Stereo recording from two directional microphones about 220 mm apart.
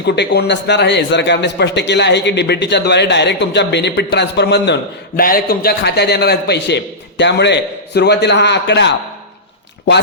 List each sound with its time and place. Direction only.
0.0 s a man's voice: 50° left (ahead or behind)